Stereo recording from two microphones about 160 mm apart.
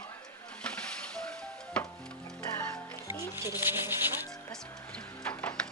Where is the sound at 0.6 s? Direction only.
5° left (ahead or behind).